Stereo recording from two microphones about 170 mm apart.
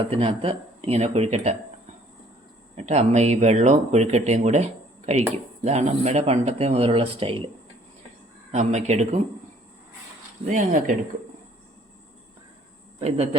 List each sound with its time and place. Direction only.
0.0 s speech: 30° right (ahead or behind)
2.7 s speech: 40° right (ahead or behind)
8.5 s speech: 40° right (ahead or behind)
10.4 s speech: 45° right (ahead or behind)
13.0 s speech: 40° right (ahead or behind)